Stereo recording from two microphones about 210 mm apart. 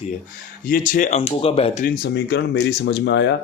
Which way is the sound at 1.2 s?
25° left (ahead or behind).